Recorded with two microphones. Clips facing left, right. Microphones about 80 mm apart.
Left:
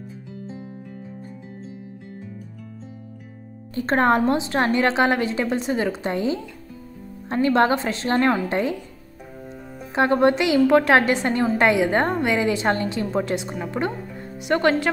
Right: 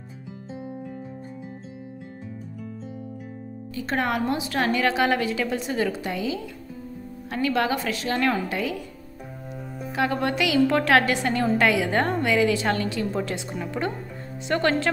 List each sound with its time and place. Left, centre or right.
3.7 s a woman's voice: left
9.9 s a woman's voice: left